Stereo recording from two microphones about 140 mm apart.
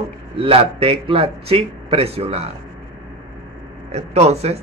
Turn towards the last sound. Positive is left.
turn(degrees=-50)  # may be behind; listen again after turning